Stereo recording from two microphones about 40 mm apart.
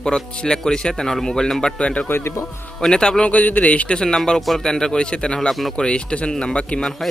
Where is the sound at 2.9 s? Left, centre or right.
Left.